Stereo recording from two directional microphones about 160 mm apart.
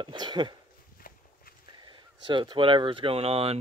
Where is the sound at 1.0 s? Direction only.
60° left (ahead or behind).